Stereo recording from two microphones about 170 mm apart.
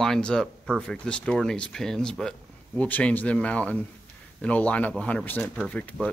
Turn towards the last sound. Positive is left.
turn(degrees=10)  # may be behind; listen again after turning